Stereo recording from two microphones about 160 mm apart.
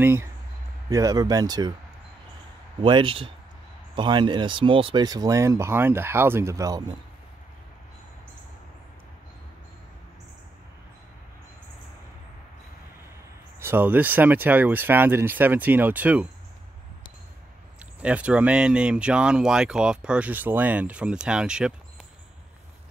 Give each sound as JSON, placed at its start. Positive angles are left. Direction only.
{"t": 0.0, "sound": "speech", "side_deg": -15}
{"t": 2.8, "sound": "a man's voice", "side_deg": -30}
{"t": 13.6, "sound": "speech", "side_deg": -15}
{"t": 18.0, "sound": "speech", "side_deg": -10}